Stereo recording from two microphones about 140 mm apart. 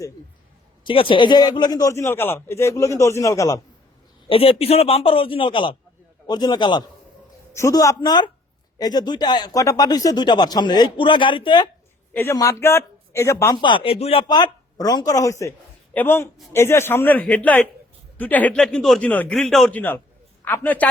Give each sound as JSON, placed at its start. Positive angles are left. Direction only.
{"t": 0.9, "sound": "speech", "side_deg": 35}
{"t": 4.3, "sound": "speech", "side_deg": 40}
{"t": 7.5, "sound": "speech", "side_deg": 20}
{"t": 12.1, "sound": "speech", "side_deg": 20}
{"t": 13.6, "sound": "a man's voice", "side_deg": 35}
{"t": 19.7, "sound": "a man's voice", "side_deg": 15}